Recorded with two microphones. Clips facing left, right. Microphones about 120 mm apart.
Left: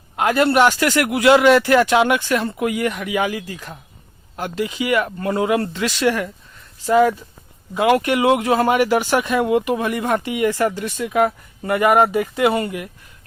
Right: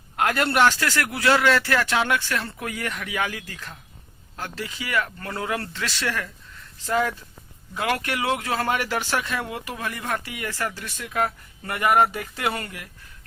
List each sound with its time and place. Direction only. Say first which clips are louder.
0.2 s speech: left 5 dB; 10° left (ahead or behind)